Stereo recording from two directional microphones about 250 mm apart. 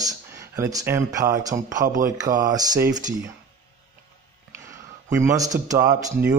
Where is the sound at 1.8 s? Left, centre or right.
Right.